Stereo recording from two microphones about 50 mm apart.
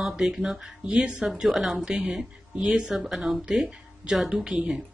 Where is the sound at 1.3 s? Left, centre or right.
Centre.